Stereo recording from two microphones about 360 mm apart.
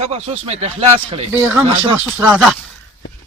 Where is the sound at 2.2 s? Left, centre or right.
Centre.